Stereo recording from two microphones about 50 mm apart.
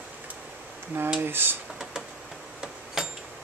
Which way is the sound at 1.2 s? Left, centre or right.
Right.